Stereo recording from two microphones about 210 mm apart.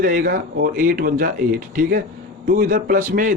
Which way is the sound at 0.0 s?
40° right (ahead or behind).